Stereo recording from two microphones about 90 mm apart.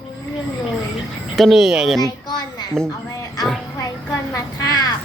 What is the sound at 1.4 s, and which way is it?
Speech, centre (ahead or behind).